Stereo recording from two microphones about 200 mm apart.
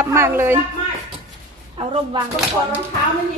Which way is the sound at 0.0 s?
10° right (ahead or behind).